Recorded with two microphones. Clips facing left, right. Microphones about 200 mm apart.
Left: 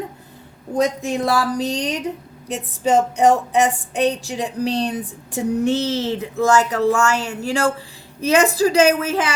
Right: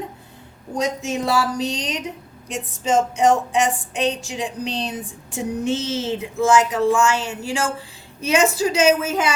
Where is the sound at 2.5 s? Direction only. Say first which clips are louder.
Left 2 dB; 65° left (ahead or behind).